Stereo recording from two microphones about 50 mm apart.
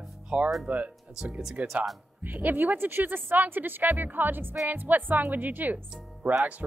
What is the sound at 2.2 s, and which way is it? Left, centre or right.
Speech, right.